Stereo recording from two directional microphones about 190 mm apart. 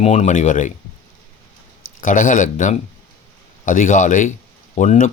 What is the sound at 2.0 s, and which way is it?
Speech, 45° left (ahead or behind).